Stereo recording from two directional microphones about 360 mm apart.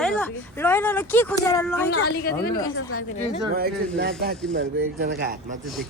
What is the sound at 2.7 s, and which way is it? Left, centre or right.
Speech, left.